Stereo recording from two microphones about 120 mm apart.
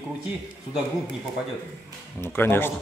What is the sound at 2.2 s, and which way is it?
Speech, 20° left (ahead or behind).